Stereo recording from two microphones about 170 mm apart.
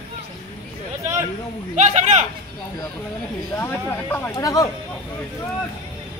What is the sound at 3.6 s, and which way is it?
Speech, 15° left (ahead or behind).